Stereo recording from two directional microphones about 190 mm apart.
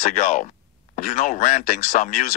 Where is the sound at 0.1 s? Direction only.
45° left (ahead or behind).